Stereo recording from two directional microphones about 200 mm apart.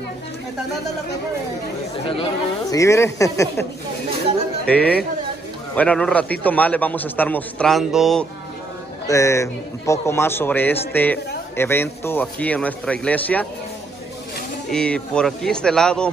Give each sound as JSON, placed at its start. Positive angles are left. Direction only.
{"t": 2.0, "sound": "a man's voice", "side_deg": 25}
{"t": 4.6, "sound": "a man's voice", "side_deg": 5}
{"t": 9.0, "sound": "a man's voice", "side_deg": 15}
{"t": 14.7, "sound": "a man's voice", "side_deg": 5}